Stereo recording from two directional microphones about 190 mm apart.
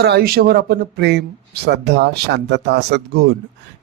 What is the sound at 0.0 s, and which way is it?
Speech, 60° right (ahead or behind).